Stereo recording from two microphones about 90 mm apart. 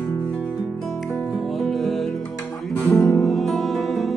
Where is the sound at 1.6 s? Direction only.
Centre (ahead or behind).